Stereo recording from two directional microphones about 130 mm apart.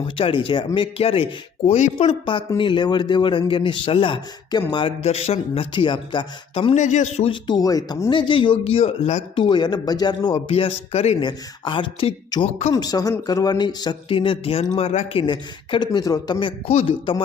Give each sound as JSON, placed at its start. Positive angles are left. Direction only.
{"t": 0.0, "sound": "speech", "side_deg": 45}
{"t": 2.6, "sound": "speech", "side_deg": 40}
{"t": 6.7, "sound": "speech", "side_deg": 65}
{"t": 7.3, "sound": "speech", "side_deg": 35}
{"t": 8.1, "sound": "speech", "side_deg": 40}
{"t": 9.3, "sound": "speech", "side_deg": 40}
{"t": 10.5, "sound": "speech", "side_deg": 50}
{"t": 11.2, "sound": "speech", "side_deg": 35}
{"t": 12.3, "sound": "speech", "side_deg": 30}
{"t": 16.6, "sound": "speech", "side_deg": 50}